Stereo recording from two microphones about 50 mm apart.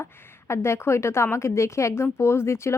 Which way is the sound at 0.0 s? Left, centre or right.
Left.